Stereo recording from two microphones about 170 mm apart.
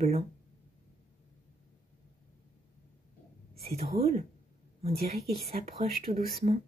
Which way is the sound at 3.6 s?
35° right (ahead or behind).